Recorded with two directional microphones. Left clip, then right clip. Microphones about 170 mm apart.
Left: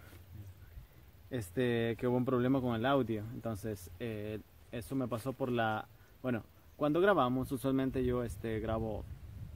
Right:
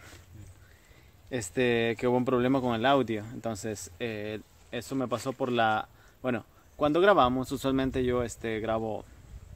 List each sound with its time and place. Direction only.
1.3 s speech: 25° right (ahead or behind)